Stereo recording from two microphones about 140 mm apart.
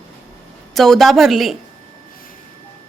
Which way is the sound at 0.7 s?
Centre (ahead or behind).